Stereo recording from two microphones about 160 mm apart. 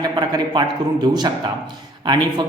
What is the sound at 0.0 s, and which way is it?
Speech, 25° right (ahead or behind).